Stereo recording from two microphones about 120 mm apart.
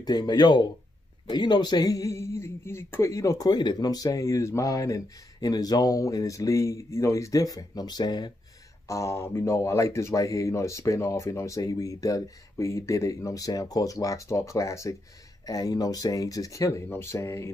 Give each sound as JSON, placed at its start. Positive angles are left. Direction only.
{"t": 0.0, "sound": "speech", "side_deg": 35}
{"t": 8.8, "sound": "speech", "side_deg": 25}